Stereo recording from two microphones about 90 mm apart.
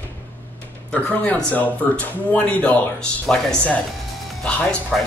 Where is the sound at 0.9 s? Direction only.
15° left (ahead or behind).